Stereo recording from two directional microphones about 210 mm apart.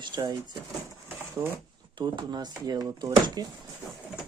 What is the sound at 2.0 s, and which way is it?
Speech, 20° right (ahead or behind).